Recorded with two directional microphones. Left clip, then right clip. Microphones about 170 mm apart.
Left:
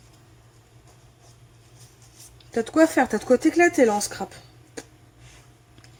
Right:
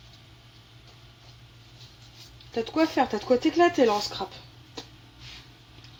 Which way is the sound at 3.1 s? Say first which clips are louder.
Left 4 dB; 35° left (ahead or behind).